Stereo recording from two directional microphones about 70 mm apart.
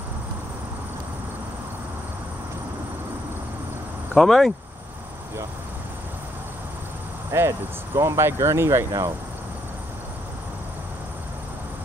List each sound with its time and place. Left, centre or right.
4.2 s speech: centre
7.2 s speech: right